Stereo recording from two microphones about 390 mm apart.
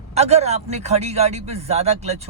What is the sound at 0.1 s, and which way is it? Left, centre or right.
A man's voice, centre.